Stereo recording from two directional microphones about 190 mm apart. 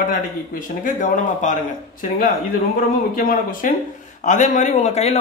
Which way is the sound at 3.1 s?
45° left (ahead or behind).